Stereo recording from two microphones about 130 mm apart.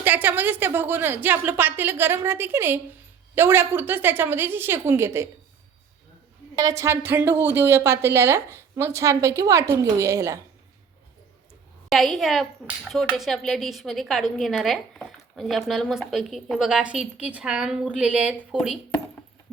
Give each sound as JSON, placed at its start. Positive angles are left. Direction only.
{"t": 0.0, "sound": "a woman's voice", "side_deg": -15}
{"t": 6.6, "sound": "a woman's voice", "side_deg": -25}
{"t": 11.9, "sound": "a woman's voice", "side_deg": 0}